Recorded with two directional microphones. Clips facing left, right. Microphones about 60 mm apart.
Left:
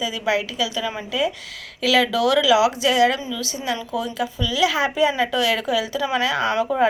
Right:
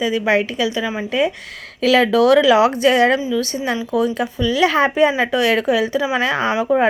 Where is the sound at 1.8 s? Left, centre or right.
Right.